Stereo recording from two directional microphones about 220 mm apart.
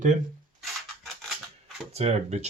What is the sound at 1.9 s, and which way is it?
Speech, 30° right (ahead or behind).